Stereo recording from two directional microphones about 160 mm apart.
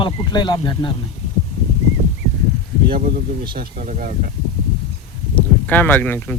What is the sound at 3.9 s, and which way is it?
Speech, 50° right (ahead or behind).